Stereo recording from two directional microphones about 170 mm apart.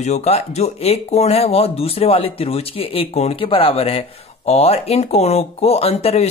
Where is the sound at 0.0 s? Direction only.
40° left (ahead or behind).